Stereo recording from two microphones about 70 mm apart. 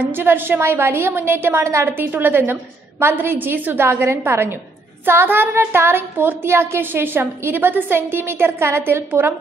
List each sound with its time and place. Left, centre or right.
0.0 s a woman's voice: right